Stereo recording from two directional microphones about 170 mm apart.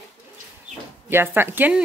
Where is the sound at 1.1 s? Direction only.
15° right (ahead or behind).